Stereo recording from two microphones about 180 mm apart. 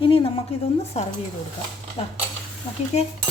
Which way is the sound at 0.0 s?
30° left (ahead or behind).